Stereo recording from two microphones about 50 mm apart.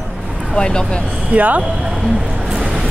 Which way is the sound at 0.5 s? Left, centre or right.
Centre.